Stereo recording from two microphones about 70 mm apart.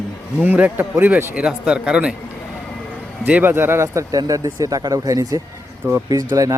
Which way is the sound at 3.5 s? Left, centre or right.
Right.